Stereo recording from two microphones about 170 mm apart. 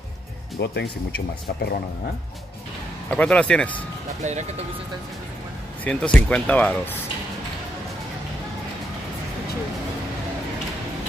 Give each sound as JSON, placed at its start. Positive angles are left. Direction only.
{"t": 0.6, "sound": "speech", "side_deg": 80}
{"t": 3.1, "sound": "speech", "side_deg": 5}
{"t": 4.2, "sound": "speech", "side_deg": -45}
{"t": 5.9, "sound": "speech", "side_deg": 5}